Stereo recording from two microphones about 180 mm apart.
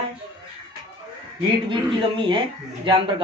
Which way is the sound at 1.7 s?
25° right (ahead or behind).